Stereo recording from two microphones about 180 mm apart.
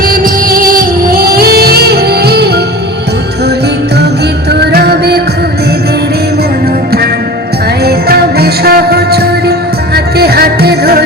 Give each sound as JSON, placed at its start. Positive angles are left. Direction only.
{"t": 0.0, "sound": "music", "side_deg": -55}
{"t": 4.5, "sound": "music", "side_deg": -65}
{"t": 7.9, "sound": "music", "side_deg": -60}